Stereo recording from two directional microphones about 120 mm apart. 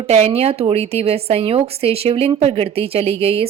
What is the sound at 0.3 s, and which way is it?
A woman's voice, 55° right (ahead or behind).